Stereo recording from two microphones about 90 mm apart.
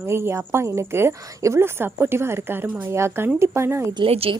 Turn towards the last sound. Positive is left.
turn(degrees=-75)  # may be behind; listen again after turning